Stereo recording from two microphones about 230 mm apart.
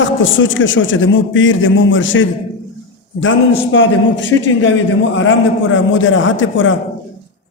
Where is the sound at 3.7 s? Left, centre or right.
Left.